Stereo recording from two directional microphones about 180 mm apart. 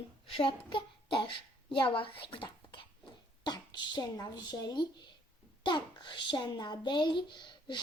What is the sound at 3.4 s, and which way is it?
A child's voice, 25° left (ahead or behind).